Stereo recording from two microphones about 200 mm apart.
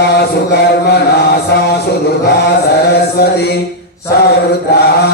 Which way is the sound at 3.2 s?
55° left (ahead or behind).